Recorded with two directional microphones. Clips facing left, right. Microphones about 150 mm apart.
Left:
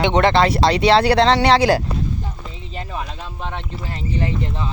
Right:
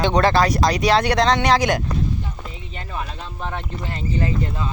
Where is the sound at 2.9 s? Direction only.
10° left (ahead or behind).